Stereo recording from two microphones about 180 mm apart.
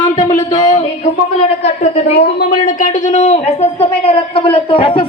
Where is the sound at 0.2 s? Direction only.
40° left (ahead or behind).